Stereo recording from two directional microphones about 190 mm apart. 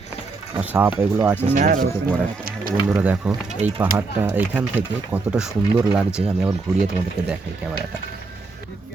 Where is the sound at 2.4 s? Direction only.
50° right (ahead or behind).